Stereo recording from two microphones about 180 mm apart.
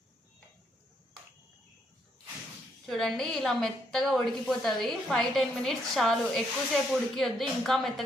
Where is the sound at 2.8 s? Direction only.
Centre (ahead or behind).